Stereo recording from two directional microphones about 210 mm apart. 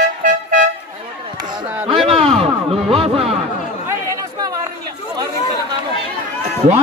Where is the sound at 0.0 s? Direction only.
40° right (ahead or behind).